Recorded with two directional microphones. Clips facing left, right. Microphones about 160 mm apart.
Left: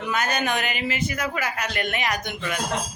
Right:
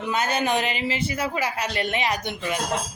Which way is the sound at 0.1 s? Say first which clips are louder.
Right 2 dB; 25° right (ahead or behind).